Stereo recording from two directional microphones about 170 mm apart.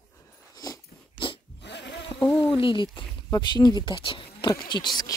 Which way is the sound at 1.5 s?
90° left.